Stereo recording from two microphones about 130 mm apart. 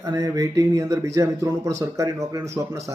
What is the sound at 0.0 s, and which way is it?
A man's voice, 25° right (ahead or behind).